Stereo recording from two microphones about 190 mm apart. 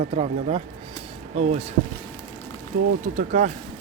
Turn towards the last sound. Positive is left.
turn(degrees=-40)  # may be behind; listen again after turning